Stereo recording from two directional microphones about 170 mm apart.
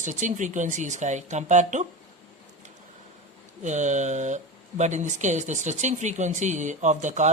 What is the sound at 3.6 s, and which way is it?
Speech, 45° right (ahead or behind).